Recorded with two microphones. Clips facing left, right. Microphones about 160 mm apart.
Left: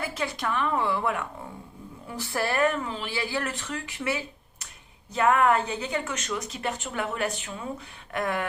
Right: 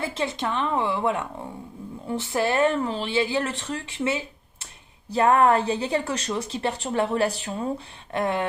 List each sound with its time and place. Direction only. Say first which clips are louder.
0.0 s speech: right 3 dB; 25° right (ahead or behind)